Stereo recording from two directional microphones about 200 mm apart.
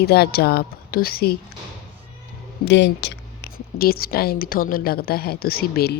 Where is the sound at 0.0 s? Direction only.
50° left (ahead or behind).